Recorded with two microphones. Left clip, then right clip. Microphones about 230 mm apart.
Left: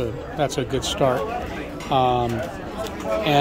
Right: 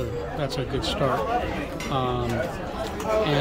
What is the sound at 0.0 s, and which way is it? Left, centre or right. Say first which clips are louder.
Speech: left 4 dB; centre.